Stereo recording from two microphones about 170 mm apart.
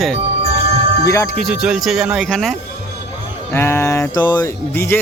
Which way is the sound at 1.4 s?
5° right (ahead or behind).